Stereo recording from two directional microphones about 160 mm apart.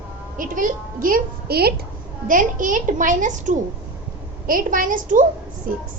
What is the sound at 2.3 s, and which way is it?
A woman's voice, 55° right (ahead or behind).